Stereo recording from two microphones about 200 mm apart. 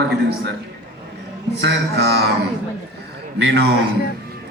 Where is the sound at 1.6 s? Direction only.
55° right (ahead or behind).